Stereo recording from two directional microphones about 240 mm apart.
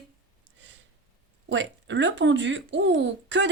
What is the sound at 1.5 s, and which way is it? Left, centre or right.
Speech, right.